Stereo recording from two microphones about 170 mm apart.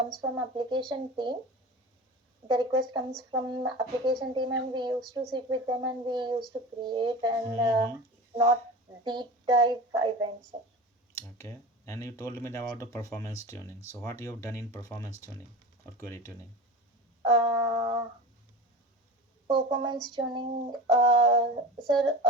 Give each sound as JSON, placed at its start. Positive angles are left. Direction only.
{"t": 0.2, "sound": "speech", "side_deg": -25}
{"t": 2.5, "sound": "speech", "side_deg": -25}
{"t": 9.0, "sound": "speech", "side_deg": -25}
{"t": 11.2, "sound": "speech", "side_deg": 15}
{"t": 17.2, "sound": "speech", "side_deg": -25}
{"t": 19.5, "sound": "speech", "side_deg": -25}